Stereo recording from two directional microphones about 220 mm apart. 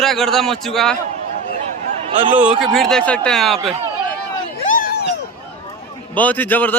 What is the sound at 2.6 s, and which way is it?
Speech, centre (ahead or behind).